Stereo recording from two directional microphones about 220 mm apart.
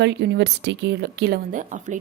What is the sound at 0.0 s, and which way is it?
A woman's voice, 50° right (ahead or behind).